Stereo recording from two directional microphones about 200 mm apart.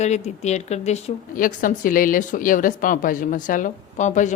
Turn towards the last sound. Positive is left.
turn(degrees=35)  # may be behind; listen again after turning